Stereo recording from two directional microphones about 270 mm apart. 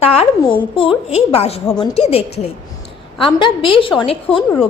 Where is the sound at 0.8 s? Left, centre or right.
Left.